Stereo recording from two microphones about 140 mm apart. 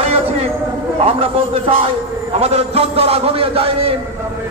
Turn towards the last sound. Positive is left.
turn(degrees=-45)  # may be behind; listen again after turning